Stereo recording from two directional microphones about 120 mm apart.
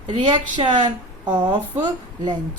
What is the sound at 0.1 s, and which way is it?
Speech, 40° right (ahead or behind).